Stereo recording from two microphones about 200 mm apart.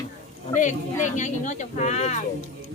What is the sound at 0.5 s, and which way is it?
A woman's voice, 40° left (ahead or behind).